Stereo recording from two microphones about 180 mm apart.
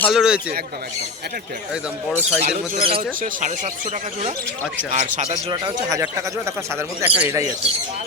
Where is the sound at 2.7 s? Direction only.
30° right (ahead or behind).